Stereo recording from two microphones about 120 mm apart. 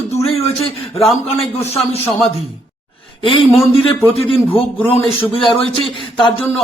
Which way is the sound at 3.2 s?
40° left (ahead or behind).